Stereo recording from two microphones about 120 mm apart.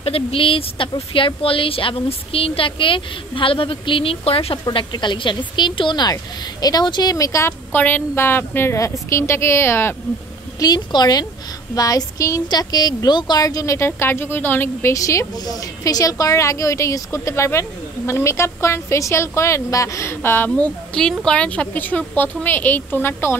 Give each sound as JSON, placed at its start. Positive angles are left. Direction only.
{"t": 0.0, "sound": "a woman's voice", "side_deg": 50}
{"t": 4.6, "sound": "a woman's voice", "side_deg": 40}
{"t": 10.6, "sound": "a woman's voice", "side_deg": 35}